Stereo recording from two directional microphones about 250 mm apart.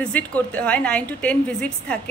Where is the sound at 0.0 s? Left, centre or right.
Centre.